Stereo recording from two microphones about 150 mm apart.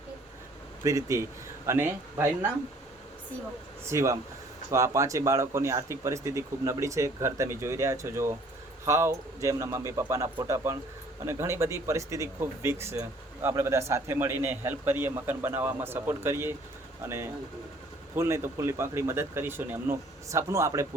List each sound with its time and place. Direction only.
0.9 s speech: 20° right (ahead or behind)
3.8 s speech: 20° right (ahead or behind)
18.1 s speech: 20° right (ahead or behind)